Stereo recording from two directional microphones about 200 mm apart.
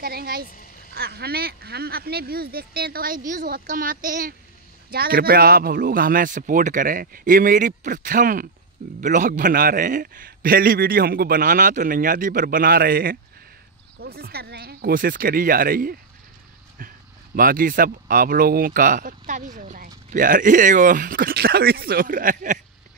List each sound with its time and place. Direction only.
0.0 s speech: 50° right (ahead or behind)
17.4 s speech: 45° right (ahead or behind)